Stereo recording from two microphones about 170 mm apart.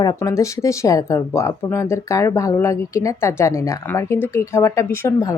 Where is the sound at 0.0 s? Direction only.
20° left (ahead or behind).